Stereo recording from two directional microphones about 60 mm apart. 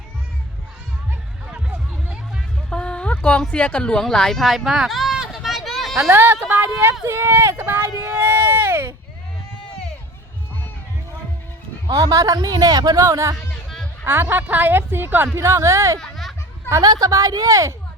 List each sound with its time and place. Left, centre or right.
1.5 s music: centre
2.6 s a sound: centre
3.5 s speech: left
4.0 s a sound: centre
6.1 s speech: right
11.9 s speech: right
14.0 s speech: right
15.4 s speech: right
16.0 s a sound: centre
16.6 s speech: right